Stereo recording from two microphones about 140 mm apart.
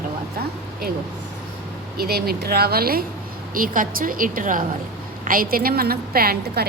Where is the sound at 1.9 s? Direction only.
90° right.